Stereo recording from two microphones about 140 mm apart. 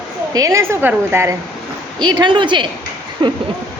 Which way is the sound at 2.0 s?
35° right (ahead or behind).